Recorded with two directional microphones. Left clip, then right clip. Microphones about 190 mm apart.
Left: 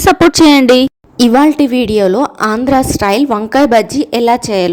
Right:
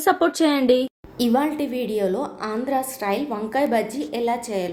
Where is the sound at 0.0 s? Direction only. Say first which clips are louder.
Left 12 dB; 50° left (ahead or behind).